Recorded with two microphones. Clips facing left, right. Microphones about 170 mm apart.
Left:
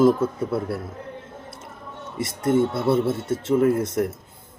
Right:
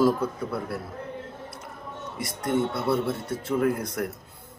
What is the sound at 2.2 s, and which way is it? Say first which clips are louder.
Speech: left 6 dB; 25° left (ahead or behind).